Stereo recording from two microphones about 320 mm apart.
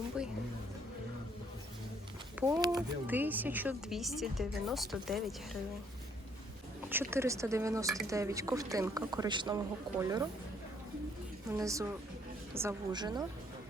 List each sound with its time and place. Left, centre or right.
2.4 s a woman's voice: centre
6.9 s speech: centre
11.5 s speech: centre